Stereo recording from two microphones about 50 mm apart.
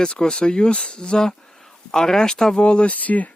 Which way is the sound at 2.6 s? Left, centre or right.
Left.